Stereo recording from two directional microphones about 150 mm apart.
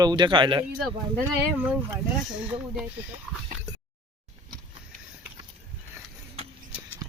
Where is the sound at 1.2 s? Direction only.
10° right (ahead or behind).